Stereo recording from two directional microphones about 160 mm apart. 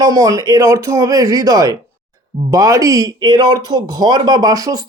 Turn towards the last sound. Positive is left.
turn(degrees=-20)  # may be behind; listen again after turning